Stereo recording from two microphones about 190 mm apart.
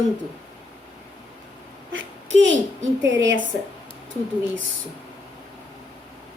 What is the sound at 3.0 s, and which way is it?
Speech, 75° right (ahead or behind).